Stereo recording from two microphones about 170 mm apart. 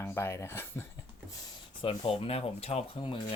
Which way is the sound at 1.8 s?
30° left (ahead or behind).